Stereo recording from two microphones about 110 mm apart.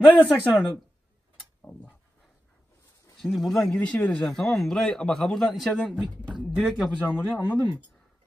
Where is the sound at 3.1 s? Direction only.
5° left (ahead or behind).